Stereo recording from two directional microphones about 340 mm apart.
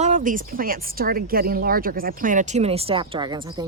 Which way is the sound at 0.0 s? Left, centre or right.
Right.